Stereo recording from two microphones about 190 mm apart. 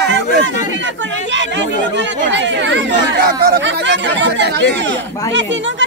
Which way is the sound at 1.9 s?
70° right (ahead or behind).